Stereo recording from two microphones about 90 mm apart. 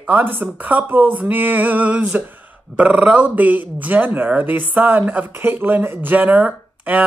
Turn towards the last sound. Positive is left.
turn(degrees=-20)  # may be behind; listen again after turning